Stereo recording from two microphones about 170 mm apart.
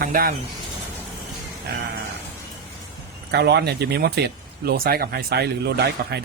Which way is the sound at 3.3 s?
75° right (ahead or behind).